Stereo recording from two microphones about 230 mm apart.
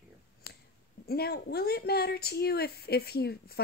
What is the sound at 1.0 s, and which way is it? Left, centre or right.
Speech, left.